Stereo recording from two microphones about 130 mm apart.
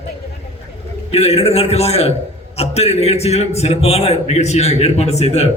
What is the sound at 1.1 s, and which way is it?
A man's voice, 55° left (ahead or behind).